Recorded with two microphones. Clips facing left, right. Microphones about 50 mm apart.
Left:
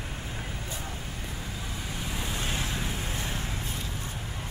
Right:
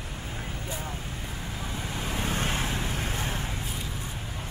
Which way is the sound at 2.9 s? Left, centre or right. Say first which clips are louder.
Right 2 dB; right.